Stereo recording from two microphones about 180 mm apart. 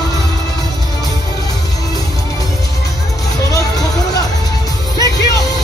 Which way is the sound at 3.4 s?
20° left (ahead or behind).